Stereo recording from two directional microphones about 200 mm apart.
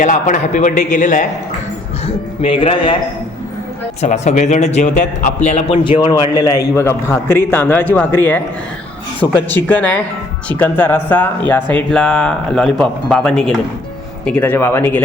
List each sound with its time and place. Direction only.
0.0 s a man's voice: 40° left (ahead or behind)
2.4 s a man's voice: 25° left (ahead or behind)
4.0 s a man's voice: 35° left (ahead or behind); by 15.0 s 10° left (ahead or behind)